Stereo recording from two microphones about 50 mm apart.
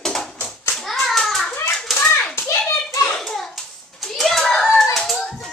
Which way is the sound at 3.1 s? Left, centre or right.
Centre.